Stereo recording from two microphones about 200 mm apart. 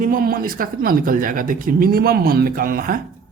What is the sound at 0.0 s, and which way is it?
Speech, 45° right (ahead or behind).